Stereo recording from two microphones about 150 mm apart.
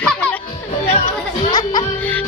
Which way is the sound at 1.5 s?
25° left (ahead or behind).